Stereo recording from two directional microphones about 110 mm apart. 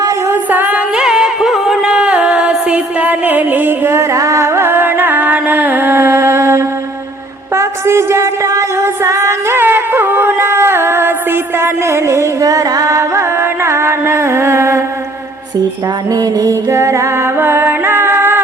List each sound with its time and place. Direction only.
0.5 s music: 15° right (ahead or behind)
7.5 s a sound: 25° right (ahead or behind)
16.1 s music: 35° right (ahead or behind)